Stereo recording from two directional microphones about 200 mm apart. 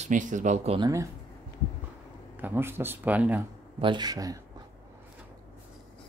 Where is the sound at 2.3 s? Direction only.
10° right (ahead or behind).